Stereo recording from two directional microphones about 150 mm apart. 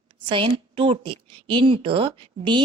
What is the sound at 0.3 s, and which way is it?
A woman's voice, 35° right (ahead or behind).